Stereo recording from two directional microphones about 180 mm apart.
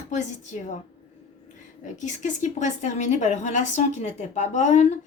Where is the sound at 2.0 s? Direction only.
40° left (ahead or behind).